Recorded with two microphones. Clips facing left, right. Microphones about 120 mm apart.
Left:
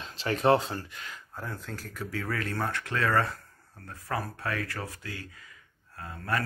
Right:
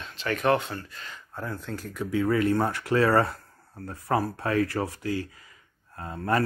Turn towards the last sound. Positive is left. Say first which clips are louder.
# right 6 dB
turn(degrees=-30)  # may be behind; listen again after turning